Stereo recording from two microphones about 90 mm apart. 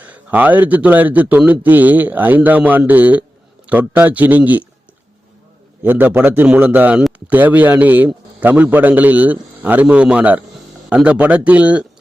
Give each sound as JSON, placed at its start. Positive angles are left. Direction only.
{"t": 0.0, "sound": "a man's voice", "side_deg": -15}
{"t": 5.8, "sound": "a man's voice", "side_deg": -20}